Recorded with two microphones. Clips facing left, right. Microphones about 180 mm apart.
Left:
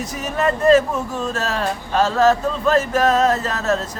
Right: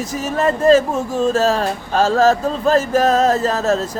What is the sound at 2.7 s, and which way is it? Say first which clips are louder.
Music: right 2 dB; 35° right (ahead or behind).